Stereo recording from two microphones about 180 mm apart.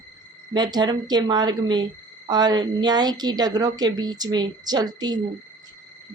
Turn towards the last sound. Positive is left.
turn(degrees=-20)  # may be behind; listen again after turning